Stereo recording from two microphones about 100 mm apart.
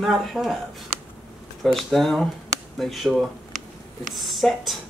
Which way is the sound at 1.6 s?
Centre (ahead or behind).